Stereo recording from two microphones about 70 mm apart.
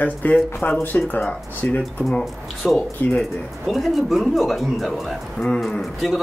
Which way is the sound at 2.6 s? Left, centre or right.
Centre.